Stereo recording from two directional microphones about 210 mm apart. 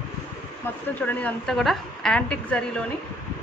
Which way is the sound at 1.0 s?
5° left (ahead or behind).